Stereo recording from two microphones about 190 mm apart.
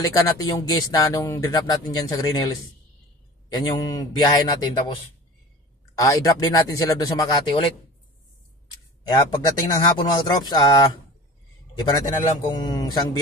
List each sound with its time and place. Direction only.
0.0 s speech: 20° left (ahead or behind)
5.9 s speech: 15° left (ahead or behind)
9.1 s speech: 20° left (ahead or behind)
12.5 s speech: 20° left (ahead or behind)